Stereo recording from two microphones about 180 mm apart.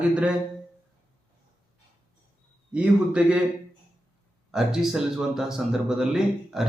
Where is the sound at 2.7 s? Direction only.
5° right (ahead or behind).